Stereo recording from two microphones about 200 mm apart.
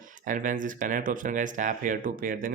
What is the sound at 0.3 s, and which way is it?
Speech, 40° right (ahead or behind).